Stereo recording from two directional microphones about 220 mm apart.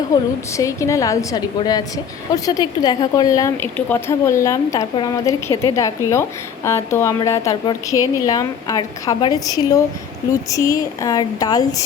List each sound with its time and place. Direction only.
0.1 s a woman's voice: 15° left (ahead or behind)